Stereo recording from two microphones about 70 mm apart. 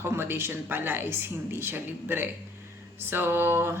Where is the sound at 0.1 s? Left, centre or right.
Right.